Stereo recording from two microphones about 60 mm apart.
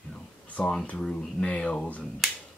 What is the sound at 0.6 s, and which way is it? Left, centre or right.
Speech, centre.